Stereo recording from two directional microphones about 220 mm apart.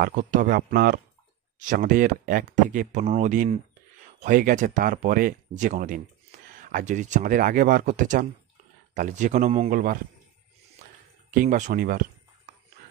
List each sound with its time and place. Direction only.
0.0 s speech: 35° right (ahead or behind)
11.3 s speech: 35° right (ahead or behind)